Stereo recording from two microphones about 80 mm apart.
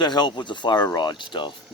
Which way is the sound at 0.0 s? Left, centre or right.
Left.